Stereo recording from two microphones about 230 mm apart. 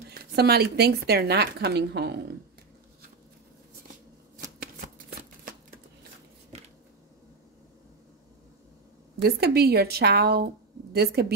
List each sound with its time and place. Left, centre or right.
0.1 s speech: right
6.5 s a sound: right
9.2 s speech: right